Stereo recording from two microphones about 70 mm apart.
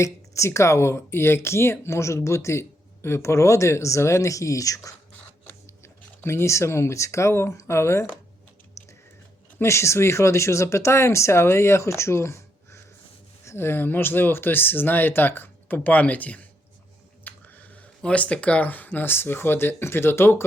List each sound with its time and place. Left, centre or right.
0.0 s speech: left
5.8 s speech: left
8.8 s typing: left
9.6 s speech: left
17.2 s a sound: left
18.0 s speech: centre; by 20.4 s left